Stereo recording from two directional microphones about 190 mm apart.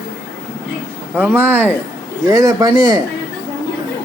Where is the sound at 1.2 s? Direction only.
10° right (ahead or behind).